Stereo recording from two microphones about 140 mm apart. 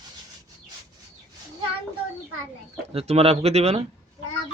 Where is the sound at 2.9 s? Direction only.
45° right (ahead or behind).